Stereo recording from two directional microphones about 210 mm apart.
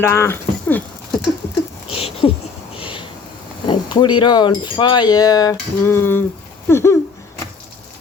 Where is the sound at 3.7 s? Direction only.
20° left (ahead or behind).